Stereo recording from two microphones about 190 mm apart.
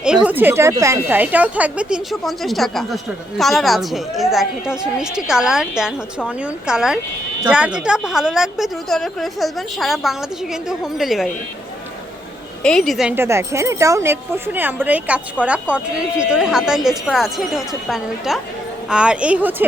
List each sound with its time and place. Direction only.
0.0 s speech: 5° right (ahead or behind)
12.6 s speech: centre (ahead or behind)